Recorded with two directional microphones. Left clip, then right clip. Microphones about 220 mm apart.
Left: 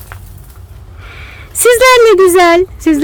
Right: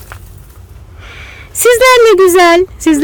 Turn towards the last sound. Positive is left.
turn(degrees=-10)  # may be behind; listen again after turning